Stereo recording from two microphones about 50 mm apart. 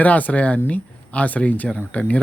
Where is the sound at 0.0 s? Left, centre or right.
Left.